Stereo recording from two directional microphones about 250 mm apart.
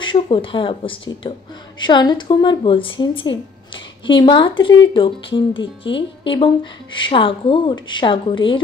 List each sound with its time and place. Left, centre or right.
0.0 s speech: centre